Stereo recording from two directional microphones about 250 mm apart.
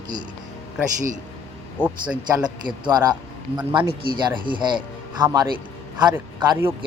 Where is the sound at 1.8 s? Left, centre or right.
Centre.